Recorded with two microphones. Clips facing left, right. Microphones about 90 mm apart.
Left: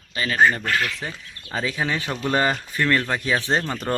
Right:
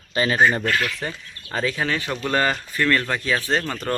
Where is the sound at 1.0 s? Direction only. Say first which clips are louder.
Right 3 dB; 5° left (ahead or behind).